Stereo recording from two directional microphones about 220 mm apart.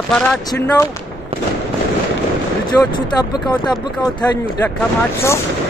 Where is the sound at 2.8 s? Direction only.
20° left (ahead or behind).